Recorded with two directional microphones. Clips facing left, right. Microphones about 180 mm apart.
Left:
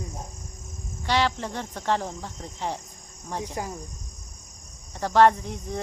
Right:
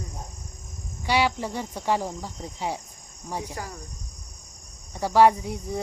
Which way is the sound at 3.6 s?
20° left (ahead or behind).